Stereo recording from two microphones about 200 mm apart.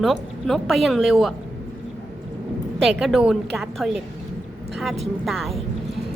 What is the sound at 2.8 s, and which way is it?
Speech, centre (ahead or behind).